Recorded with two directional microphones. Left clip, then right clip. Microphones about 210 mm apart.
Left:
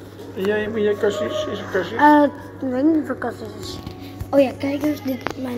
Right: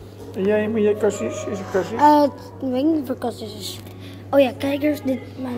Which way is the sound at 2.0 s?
10° right (ahead or behind).